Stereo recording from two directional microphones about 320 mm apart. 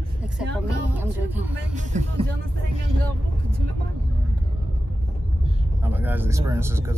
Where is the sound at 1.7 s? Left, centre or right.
Right.